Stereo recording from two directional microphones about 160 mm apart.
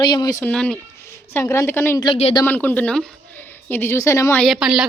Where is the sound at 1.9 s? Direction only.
30° left (ahead or behind).